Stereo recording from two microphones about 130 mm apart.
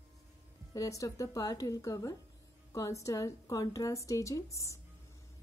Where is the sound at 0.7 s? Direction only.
25° left (ahead or behind).